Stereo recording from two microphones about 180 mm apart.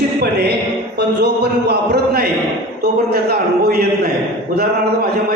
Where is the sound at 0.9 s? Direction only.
65° right (ahead or behind).